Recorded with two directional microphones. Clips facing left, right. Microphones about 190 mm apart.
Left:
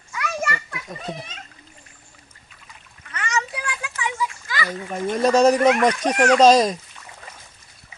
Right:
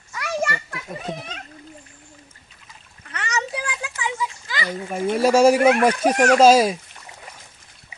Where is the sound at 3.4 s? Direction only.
25° right (ahead or behind).